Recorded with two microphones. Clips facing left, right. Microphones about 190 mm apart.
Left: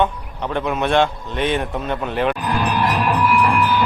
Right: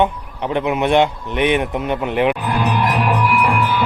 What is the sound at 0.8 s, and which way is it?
Speech, 20° right (ahead or behind).